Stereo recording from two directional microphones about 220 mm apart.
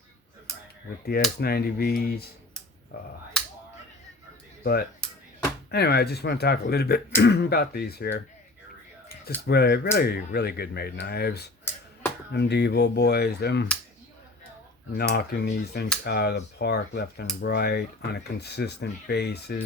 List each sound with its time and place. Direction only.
1.4 s speech: 45° left (ahead or behind)
4.6 s speech: 45° left (ahead or behind)
9.5 s speech: 45° left (ahead or behind)
14.9 s speech: 45° left (ahead or behind)